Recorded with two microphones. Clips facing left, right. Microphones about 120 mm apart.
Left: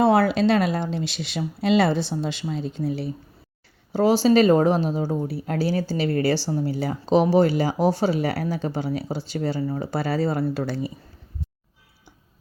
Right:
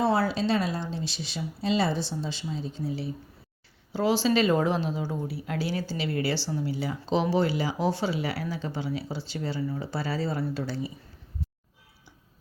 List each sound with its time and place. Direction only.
0.0 s speech: 60° left (ahead or behind)
3.9 s speech: 40° left (ahead or behind)